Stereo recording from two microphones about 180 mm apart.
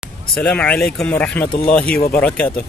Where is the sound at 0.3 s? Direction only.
5° left (ahead or behind).